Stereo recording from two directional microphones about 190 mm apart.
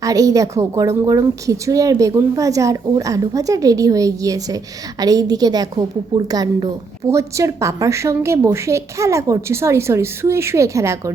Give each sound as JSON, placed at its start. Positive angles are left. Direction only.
{"t": 0.0, "sound": "a woman's voice", "side_deg": -20}